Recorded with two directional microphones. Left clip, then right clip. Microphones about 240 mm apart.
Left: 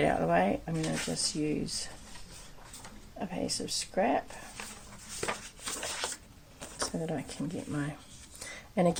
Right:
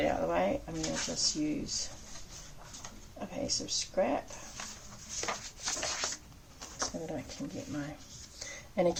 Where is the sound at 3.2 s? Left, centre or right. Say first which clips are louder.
Left 1 dB; left.